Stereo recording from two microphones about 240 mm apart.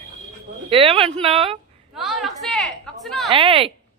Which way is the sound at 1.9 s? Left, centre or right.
Centre.